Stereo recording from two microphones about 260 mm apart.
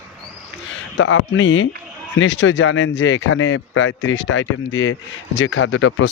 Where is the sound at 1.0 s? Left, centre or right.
Left.